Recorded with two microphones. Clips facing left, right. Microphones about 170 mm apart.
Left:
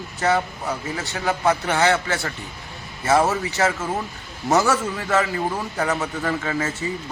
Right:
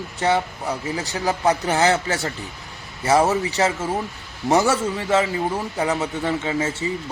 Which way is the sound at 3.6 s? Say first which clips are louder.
Even; 20° right (ahead or behind).